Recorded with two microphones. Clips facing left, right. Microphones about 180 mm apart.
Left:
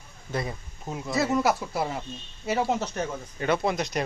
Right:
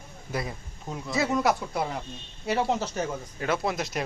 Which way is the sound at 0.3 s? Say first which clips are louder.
Left 1 dB; centre (ahead or behind).